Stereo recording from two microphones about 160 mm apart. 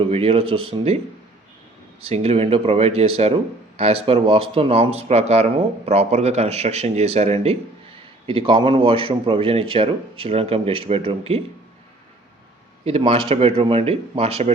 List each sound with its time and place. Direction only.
0.0 s speech: 40° right (ahead or behind)
2.0 s speech: 40° right (ahead or behind)
12.8 s speech: 35° right (ahead or behind)